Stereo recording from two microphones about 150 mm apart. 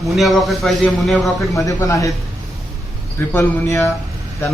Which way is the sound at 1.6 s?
20° left (ahead or behind).